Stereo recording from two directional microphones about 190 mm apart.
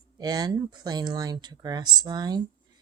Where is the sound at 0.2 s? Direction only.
20° right (ahead or behind).